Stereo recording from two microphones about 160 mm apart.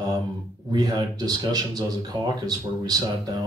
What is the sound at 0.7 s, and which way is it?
Speech, 25° right (ahead or behind).